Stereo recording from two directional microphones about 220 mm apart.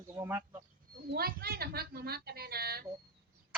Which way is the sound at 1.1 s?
45° right (ahead or behind).